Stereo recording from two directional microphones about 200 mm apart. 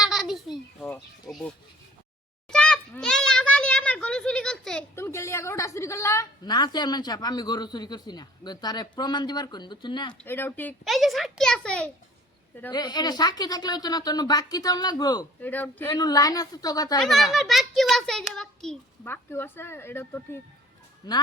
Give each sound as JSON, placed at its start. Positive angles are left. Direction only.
{"t": 0.0, "sound": "a sound", "side_deg": 0}
{"t": 0.5, "sound": "speech", "side_deg": 10}
{"t": 0.9, "sound": "a child's voice", "side_deg": 0}
{"t": 10.2, "sound": "a child's voice", "side_deg": 10}
{"t": 12.7, "sound": "a woman's voice", "side_deg": 20}
{"t": 17.0, "sound": "a child's voice", "side_deg": 0}